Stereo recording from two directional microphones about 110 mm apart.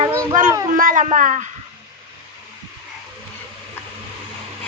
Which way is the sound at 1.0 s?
90° right.